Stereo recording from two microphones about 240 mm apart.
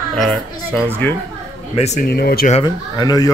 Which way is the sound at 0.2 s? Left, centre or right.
Centre.